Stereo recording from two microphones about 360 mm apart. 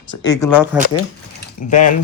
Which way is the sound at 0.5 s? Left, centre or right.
Centre.